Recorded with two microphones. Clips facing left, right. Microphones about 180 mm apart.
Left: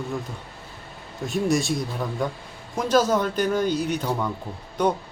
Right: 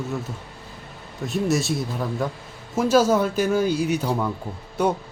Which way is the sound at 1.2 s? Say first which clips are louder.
Even; centre (ahead or behind).